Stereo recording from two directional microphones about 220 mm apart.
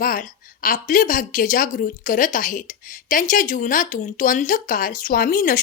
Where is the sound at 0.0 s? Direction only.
40° left (ahead or behind).